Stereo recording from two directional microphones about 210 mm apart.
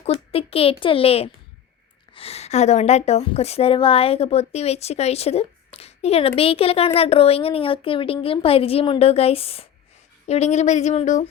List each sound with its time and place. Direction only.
0.0 s a woman's voice: 25° left (ahead or behind)